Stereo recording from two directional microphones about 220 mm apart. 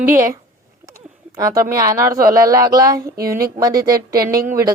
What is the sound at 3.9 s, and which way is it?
Speech, 45° right (ahead or behind).